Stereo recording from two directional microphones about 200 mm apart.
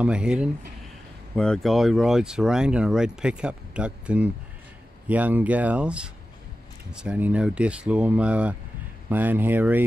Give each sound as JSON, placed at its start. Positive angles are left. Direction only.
{"t": 0.0, "sound": "speech", "side_deg": -5}